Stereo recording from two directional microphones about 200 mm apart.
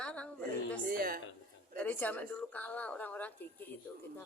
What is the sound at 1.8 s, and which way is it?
Speech, 10° left (ahead or behind).